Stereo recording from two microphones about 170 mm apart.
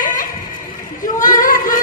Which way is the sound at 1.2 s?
50° left (ahead or behind).